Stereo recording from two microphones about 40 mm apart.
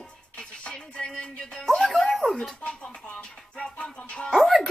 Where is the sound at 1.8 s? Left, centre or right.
Centre.